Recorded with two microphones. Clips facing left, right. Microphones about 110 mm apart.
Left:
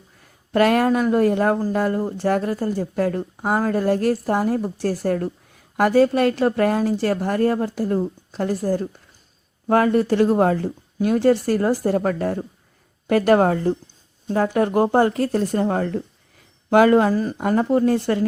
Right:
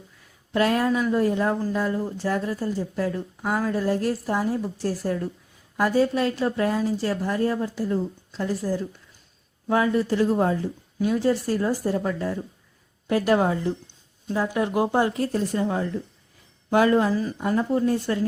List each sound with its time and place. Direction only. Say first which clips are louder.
0.2 s speech: left 5 dB; 65° left (ahead or behind)
16.7 s speech: left 5 dB; 70° left (ahead or behind); by 17.6 s 50° left (ahead or behind)
17.6 s speech: left 5 dB; 75° left (ahead or behind)